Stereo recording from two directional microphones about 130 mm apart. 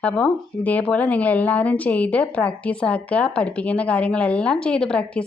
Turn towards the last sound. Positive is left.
turn(degrees=5)  # may be behind; listen again after turning